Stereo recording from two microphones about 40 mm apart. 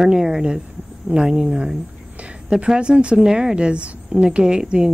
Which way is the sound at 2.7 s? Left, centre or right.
Right.